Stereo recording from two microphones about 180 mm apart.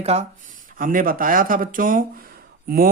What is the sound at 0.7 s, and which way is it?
Speech, 50° right (ahead or behind).